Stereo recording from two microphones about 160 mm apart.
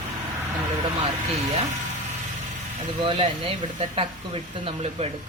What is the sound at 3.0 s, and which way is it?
Speech, 30° right (ahead or behind).